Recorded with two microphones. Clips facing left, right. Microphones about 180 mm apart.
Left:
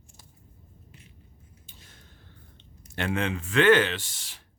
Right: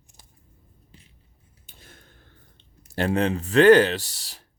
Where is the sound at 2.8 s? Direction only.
35° right (ahead or behind).